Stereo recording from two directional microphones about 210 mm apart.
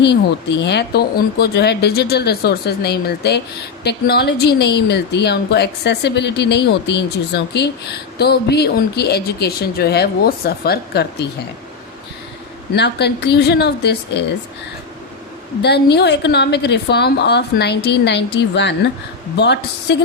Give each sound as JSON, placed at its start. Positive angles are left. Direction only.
{"t": 0.0, "sound": "a woman's voice", "side_deg": 55}
{"t": 12.7, "sound": "a woman's voice", "side_deg": 55}
{"t": 15.6, "sound": "a woman's voice", "side_deg": 50}